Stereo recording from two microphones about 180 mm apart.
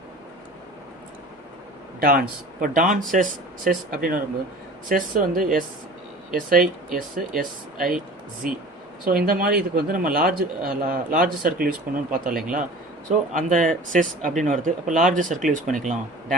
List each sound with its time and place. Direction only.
2.0 s a man's voice: 50° right (ahead or behind)
9.0 s a man's voice: 55° right (ahead or behind)